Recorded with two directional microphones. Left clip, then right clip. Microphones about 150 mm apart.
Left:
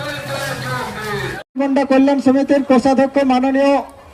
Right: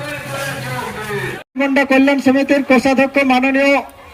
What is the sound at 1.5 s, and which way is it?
Speech, 35° left (ahead or behind).